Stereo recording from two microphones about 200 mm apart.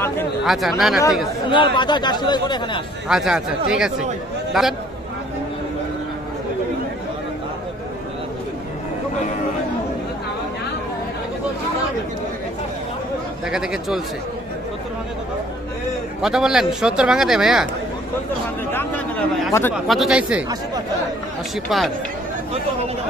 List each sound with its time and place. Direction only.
0.5 s speech: centre (ahead or behind)
1.8 s speech: 20° left (ahead or behind)
3.1 s a man's voice: centre (ahead or behind)
13.5 s speech: 5° right (ahead or behind)
16.2 s speech: 5° right (ahead or behind)
18.7 s speech: 10° left (ahead or behind)
19.7 s speech: centre (ahead or behind)
21.6 s speech: centre (ahead or behind)